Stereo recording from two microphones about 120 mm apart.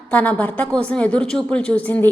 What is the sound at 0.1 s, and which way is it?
A woman's voice, 15° left (ahead or behind).